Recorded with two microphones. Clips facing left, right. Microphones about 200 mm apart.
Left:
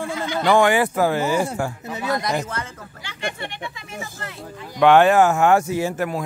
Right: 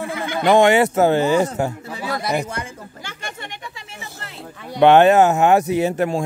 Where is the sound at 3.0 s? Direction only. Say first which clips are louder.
Left 1 dB; 45° right (ahead or behind).